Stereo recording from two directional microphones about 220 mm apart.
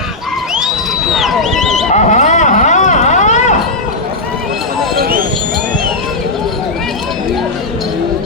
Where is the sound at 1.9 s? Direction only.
30° left (ahead or behind).